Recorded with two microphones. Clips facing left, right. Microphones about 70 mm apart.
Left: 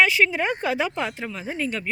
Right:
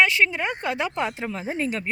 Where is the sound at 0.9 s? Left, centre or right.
Centre.